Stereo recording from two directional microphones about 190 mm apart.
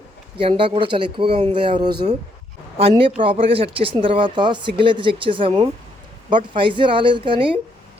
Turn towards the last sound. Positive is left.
turn(degrees=-25)  # may be behind; listen again after turning